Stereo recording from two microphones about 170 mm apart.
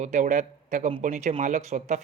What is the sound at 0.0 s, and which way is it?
Speech, 45° right (ahead or behind).